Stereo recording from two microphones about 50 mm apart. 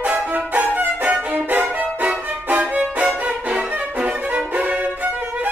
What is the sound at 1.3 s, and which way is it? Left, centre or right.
Violin, right.